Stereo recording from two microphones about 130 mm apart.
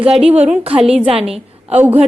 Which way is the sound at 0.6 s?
45° right (ahead or behind).